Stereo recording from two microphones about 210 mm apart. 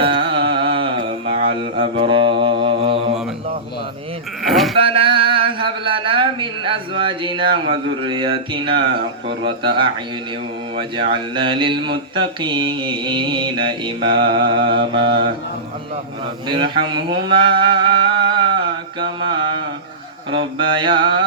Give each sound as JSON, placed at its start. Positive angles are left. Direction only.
{"t": 0.0, "sound": "music", "side_deg": -25}
{"t": 1.8, "sound": "mantra", "side_deg": -25}
{"t": 4.4, "sound": "sheep", "side_deg": 0}
{"t": 4.8, "sound": "a sound", "side_deg": -25}
{"t": 9.4, "sound": "mantra", "side_deg": -25}
{"t": 16.5, "sound": "a sound", "side_deg": -25}
{"t": 20.6, "sound": "mantra", "side_deg": -25}